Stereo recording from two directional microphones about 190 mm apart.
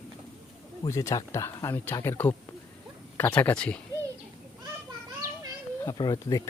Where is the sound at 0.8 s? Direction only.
15° left (ahead or behind).